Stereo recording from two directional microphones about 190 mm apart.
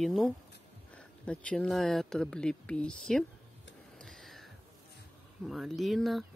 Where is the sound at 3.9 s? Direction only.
Centre (ahead or behind).